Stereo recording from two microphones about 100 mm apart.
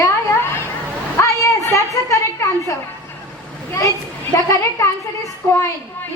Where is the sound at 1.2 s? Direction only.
30° left (ahead or behind).